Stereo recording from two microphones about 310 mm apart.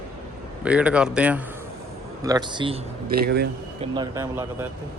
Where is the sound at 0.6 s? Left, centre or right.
Centre.